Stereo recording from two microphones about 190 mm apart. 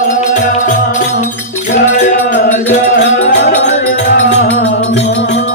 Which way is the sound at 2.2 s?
45° left (ahead or behind).